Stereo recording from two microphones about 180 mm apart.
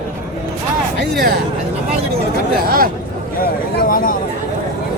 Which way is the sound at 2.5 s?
55° right (ahead or behind).